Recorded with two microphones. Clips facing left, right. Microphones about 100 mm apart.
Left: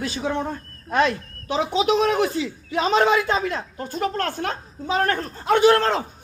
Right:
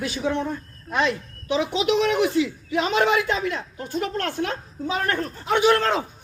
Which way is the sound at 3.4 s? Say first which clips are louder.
Left 1 dB; 40° left (ahead or behind).